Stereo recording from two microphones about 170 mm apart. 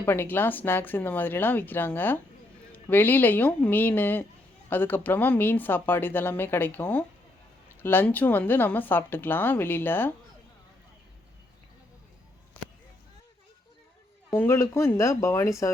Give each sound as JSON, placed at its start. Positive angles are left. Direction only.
{"t": 0.0, "sound": "speech", "side_deg": 15}
{"t": 14.3, "sound": "speech", "side_deg": 15}